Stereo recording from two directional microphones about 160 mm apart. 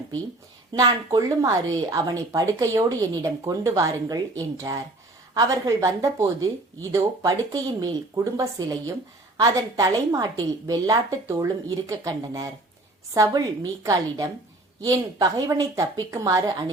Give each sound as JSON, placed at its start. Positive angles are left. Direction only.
{"t": 0.7, "sound": "speech", "side_deg": -25}